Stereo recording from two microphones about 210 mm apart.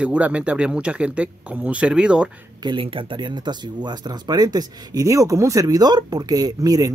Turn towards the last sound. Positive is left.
turn(degrees=-15)  # may be behind; listen again after turning